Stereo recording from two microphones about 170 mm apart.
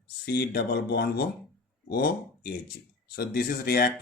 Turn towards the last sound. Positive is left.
turn(degrees=65)  # may be behind; listen again after turning